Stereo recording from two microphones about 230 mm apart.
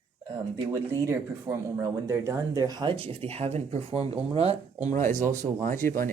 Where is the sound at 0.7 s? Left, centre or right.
Centre.